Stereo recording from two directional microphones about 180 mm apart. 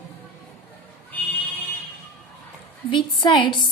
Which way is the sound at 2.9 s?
25° left (ahead or behind).